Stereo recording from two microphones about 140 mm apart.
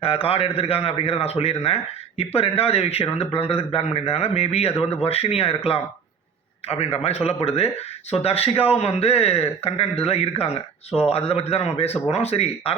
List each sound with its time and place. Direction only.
0.0 s speech: 45° left (ahead or behind)